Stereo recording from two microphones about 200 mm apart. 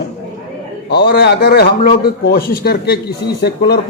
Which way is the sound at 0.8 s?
50° left (ahead or behind).